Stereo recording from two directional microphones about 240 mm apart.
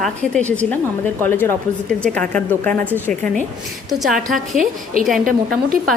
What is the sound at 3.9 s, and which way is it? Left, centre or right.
Speech, centre.